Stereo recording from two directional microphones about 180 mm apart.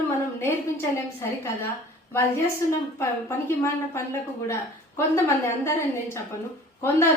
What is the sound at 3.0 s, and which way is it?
A woman's voice, 15° left (ahead or behind).